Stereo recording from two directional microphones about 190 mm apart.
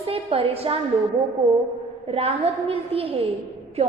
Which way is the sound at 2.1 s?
30° right (ahead or behind).